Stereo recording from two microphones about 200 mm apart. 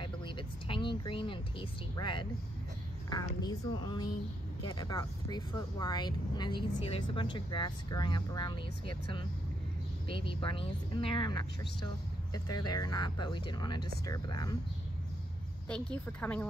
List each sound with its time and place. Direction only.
0.0 s vehicle: 25° left (ahead or behind)
3.1 s speech: 20° left (ahead or behind)
10.0 s speech: 25° left (ahead or behind)
16.1 s speech: 5° left (ahead or behind)